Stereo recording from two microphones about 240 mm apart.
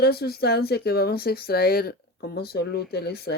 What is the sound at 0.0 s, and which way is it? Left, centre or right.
Speech, left.